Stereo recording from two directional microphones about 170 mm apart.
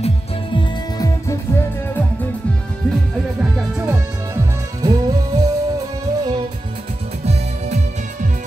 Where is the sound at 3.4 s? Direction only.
10° right (ahead or behind).